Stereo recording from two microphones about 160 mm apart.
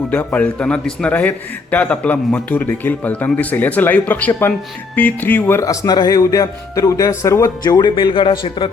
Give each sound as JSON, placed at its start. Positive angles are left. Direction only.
{"t": 0.1, "sound": "a man's voice", "side_deg": 10}